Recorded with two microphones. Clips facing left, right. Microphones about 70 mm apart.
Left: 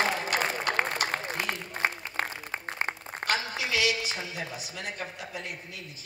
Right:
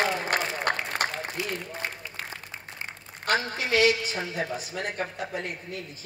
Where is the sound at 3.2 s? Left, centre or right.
Right.